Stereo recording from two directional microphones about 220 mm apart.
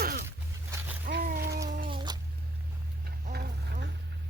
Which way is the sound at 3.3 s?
45° right (ahead or behind).